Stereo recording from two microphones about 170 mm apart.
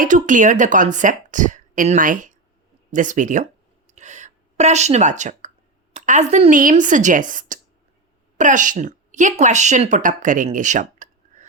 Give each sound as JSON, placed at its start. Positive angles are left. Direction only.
{"t": 0.0, "sound": "a woman's voice", "side_deg": -50}
{"t": 3.8, "sound": "a sound", "side_deg": -45}
{"t": 5.9, "sound": "a woman's voice", "side_deg": -45}